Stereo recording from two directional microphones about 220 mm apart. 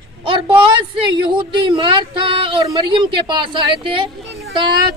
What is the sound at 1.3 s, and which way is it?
Speech, 20° right (ahead or behind).